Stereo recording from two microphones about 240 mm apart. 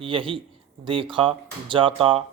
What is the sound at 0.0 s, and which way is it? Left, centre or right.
Speech, right.